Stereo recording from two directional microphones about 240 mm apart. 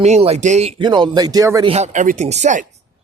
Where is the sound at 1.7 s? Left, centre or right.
Right.